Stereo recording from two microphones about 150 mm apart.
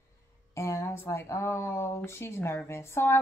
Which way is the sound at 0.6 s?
20° left (ahead or behind).